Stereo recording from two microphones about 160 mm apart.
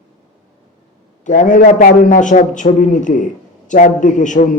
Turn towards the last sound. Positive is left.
turn(degrees=50)  # may be behind; listen again after turning